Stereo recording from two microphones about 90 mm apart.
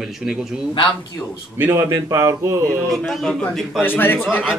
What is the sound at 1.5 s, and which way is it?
A man's voice, 25° right (ahead or behind).